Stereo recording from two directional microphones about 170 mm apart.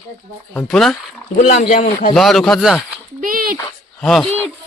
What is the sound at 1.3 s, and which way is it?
Speech, 45° left (ahead or behind).